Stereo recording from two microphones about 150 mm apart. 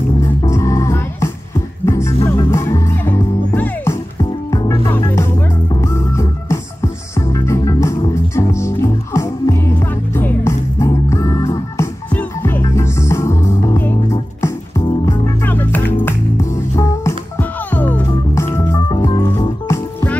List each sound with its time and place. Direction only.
0.2 s music: 20° left (ahead or behind)
15.0 s music: 15° left (ahead or behind)